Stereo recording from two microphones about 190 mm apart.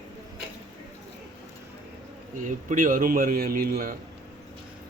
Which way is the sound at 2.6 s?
45° right (ahead or behind).